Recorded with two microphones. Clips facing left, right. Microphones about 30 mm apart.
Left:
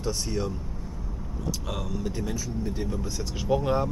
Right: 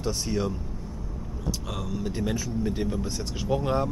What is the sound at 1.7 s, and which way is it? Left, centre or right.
Speech, centre.